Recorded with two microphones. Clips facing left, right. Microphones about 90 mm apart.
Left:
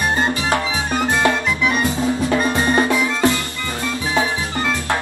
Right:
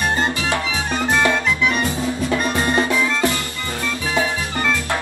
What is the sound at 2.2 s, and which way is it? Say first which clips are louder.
Music: left 1 dB; 30° left (ahead or behind).